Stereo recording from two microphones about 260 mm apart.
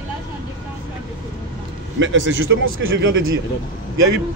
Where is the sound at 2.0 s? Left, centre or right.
Right.